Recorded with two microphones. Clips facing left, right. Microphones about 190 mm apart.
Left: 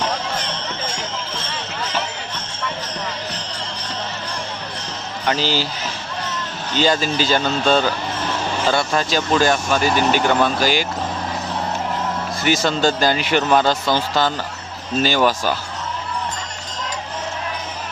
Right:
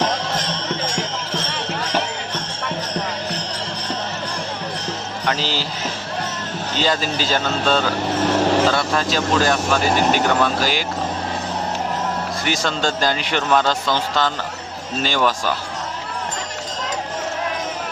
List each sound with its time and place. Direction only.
5.2 s a man's voice: centre (ahead or behind)
6.7 s speech: centre (ahead or behind)
8.4 s vehicle: 75° right (ahead or behind)
8.7 s speech: centre (ahead or behind)
12.5 s speech: 5° left (ahead or behind)